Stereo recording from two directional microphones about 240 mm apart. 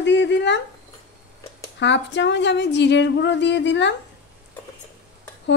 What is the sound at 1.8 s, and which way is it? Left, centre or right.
A woman's voice, left.